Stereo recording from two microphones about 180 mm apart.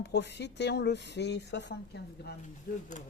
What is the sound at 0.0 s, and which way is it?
Speech, 70° left (ahead or behind).